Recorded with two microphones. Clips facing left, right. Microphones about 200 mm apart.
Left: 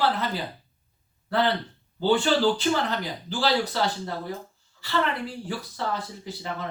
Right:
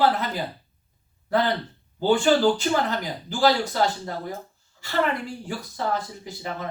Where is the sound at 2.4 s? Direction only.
45° right (ahead or behind).